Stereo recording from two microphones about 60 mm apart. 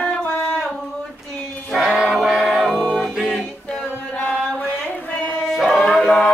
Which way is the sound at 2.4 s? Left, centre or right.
Centre.